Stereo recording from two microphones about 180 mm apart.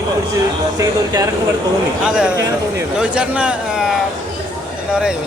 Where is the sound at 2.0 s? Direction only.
5° right (ahead or behind).